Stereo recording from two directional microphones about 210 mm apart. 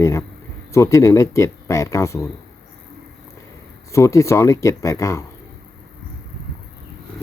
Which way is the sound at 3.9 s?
15° left (ahead or behind).